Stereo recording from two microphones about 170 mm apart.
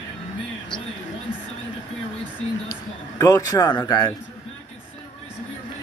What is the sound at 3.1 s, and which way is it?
Speech, 20° left (ahead or behind).